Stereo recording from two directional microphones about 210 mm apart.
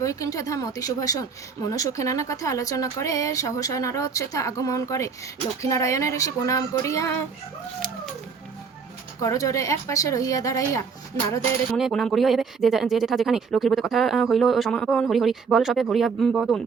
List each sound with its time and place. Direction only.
0.0 s speech: 15° left (ahead or behind)
9.2 s speech: 15° left (ahead or behind)
11.8 s speech: centre (ahead or behind)